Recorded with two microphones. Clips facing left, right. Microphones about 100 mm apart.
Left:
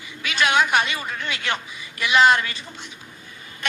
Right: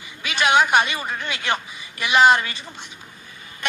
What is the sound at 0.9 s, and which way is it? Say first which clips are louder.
Speech: right 2 dB; 15° right (ahead or behind).